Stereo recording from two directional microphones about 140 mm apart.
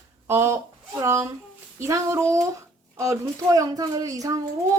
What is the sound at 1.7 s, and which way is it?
A woman's voice, 20° right (ahead or behind).